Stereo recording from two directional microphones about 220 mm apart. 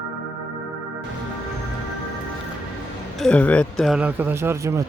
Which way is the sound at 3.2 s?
5° left (ahead or behind).